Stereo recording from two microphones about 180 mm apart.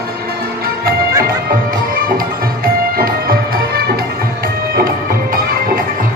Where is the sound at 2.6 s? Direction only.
55° right (ahead or behind).